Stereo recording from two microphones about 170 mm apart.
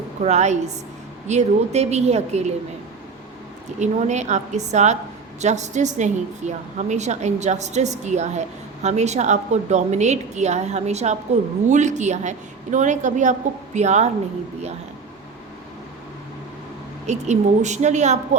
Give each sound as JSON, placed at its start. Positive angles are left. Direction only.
{"t": 0.2, "sound": "a woman's voice", "side_deg": -40}
{"t": 3.8, "sound": "a woman's voice", "side_deg": -45}
{"t": 17.1, "sound": "a woman's voice", "side_deg": -45}